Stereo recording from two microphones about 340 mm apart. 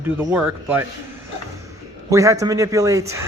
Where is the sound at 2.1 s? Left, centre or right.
Centre.